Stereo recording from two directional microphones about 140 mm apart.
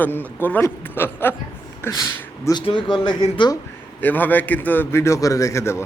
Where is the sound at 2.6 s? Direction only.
35° left (ahead or behind).